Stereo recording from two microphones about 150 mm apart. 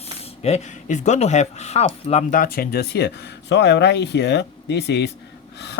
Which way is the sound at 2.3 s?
75° left (ahead or behind).